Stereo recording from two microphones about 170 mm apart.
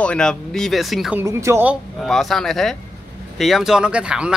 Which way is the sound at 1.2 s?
15° right (ahead or behind).